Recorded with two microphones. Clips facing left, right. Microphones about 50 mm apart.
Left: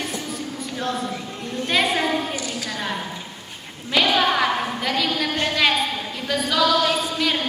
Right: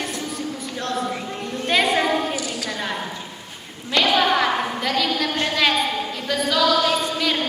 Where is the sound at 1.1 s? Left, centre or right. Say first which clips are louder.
Right 3 dB; right.